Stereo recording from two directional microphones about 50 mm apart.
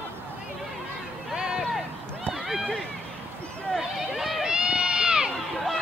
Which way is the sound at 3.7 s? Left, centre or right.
Centre.